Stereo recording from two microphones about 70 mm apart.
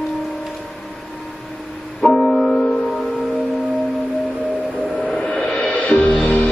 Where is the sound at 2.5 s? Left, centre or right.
Centre.